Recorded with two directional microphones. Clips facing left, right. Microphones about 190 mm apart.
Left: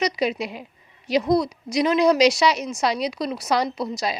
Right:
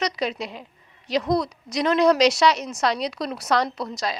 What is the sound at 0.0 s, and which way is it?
A woman's voice, 10° left (ahead or behind).